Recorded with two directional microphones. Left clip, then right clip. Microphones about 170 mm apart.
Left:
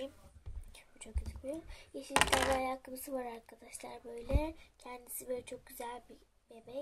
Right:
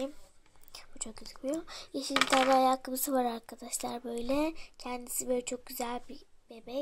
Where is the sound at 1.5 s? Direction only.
25° right (ahead or behind).